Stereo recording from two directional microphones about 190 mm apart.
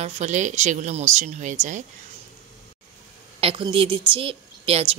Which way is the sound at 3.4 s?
30° right (ahead or behind).